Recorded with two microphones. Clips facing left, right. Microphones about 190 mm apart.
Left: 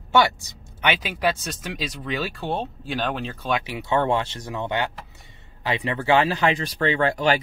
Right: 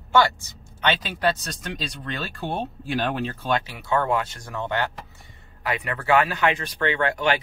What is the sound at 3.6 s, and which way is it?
Speech, 20° left (ahead or behind).